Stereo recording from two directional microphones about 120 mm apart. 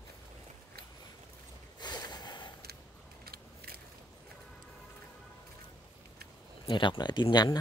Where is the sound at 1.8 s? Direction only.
35° left (ahead or behind).